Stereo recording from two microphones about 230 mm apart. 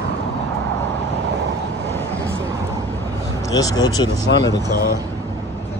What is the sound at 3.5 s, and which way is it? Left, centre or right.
Speech, centre.